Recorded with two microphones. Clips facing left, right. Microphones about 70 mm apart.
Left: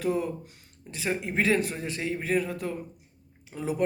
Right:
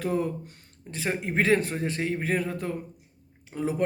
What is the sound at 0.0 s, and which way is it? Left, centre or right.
Speech, right.